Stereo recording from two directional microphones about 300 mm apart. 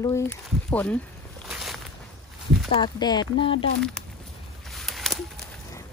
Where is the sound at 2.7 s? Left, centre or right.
Centre.